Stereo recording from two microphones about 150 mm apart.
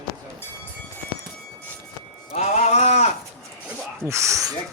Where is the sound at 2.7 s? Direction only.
45° left (ahead or behind).